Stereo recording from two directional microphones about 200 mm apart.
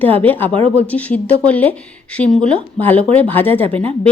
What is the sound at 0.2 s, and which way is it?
A woman's voice, 10° left (ahead or behind).